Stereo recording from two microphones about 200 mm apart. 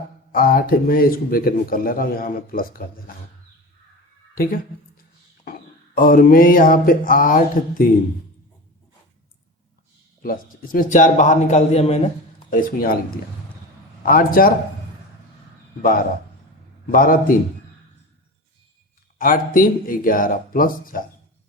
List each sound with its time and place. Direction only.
0.3 s a man's voice: 45° left (ahead or behind)
5.5 s a sound: 45° left (ahead or behind)
10.2 s a man's voice: 45° left (ahead or behind)
15.8 s a man's voice: 45° left (ahead or behind)
19.2 s a man's voice: 45° left (ahead or behind)